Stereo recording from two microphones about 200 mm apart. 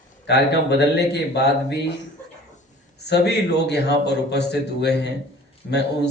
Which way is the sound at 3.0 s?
55° left (ahead or behind).